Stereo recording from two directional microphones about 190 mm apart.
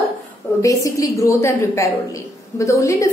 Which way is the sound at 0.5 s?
15° left (ahead or behind).